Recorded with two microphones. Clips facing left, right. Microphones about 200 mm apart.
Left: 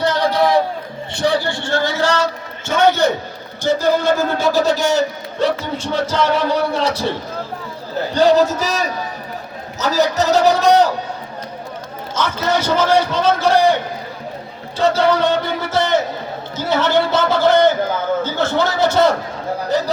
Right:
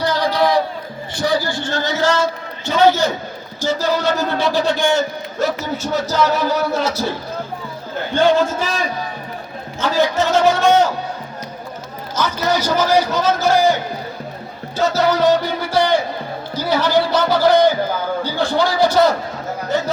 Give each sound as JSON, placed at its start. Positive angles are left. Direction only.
{"t": 0.0, "sound": "a sound", "side_deg": 25}
{"t": 1.1, "sound": "a man's voice", "side_deg": 25}
{"t": 2.6, "sound": "a man's voice", "side_deg": 60}
{"t": 8.1, "sound": "a man's voice", "side_deg": 40}
{"t": 12.2, "sound": "a man's voice", "side_deg": -10}
{"t": 12.5, "sound": "a man's voice", "side_deg": 25}
{"t": 14.8, "sound": "a man's voice", "side_deg": 30}
{"t": 17.5, "sound": "a sound", "side_deg": -10}
{"t": 18.2, "sound": "a sound", "side_deg": 20}
{"t": 18.5, "sound": "a man's voice", "side_deg": 20}
{"t": 19.6, "sound": "a man's voice", "side_deg": 35}